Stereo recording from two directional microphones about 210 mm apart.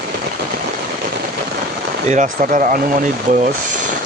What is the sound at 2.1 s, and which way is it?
Speech, 35° right (ahead or behind).